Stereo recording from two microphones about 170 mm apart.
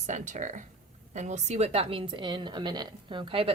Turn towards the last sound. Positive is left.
turn(degrees=-30)  # may be behind; listen again after turning